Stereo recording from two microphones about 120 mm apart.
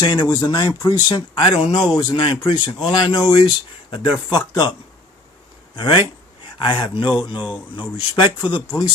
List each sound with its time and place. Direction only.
0.0 s speech: 40° left (ahead or behind)
5.7 s speech: 40° left (ahead or behind)